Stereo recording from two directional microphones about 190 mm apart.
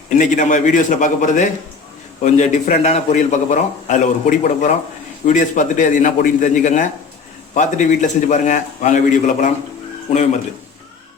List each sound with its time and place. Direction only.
0.1 s a man's voice: 40° left (ahead or behind)